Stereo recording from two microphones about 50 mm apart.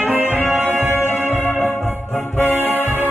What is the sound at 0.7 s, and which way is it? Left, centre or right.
Music, right.